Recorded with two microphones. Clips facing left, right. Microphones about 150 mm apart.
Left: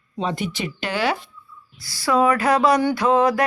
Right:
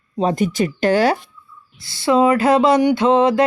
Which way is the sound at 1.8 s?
25° right (ahead or behind).